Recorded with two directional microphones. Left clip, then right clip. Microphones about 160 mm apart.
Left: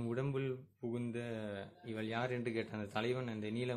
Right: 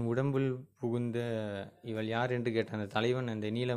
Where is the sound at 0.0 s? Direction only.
35° right (ahead or behind).